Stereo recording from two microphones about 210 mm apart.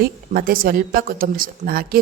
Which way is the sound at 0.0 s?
45° right (ahead or behind).